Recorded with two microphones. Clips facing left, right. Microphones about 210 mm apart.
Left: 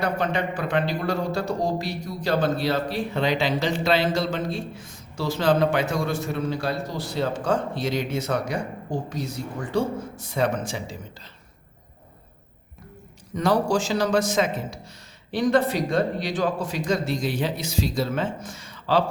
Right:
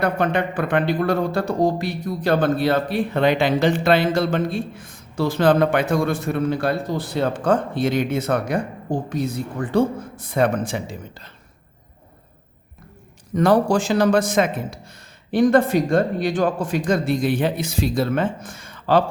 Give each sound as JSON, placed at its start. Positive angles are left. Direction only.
{"t": 0.0, "sound": "speech", "side_deg": -55}
{"t": 13.3, "sound": "a man's voice", "side_deg": -55}